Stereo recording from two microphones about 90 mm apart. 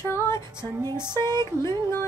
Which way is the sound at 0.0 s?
30° left (ahead or behind).